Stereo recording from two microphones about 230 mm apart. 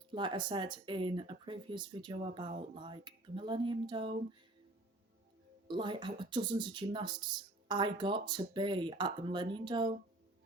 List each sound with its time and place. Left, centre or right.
0.1 s speech: right
5.6 s speech: right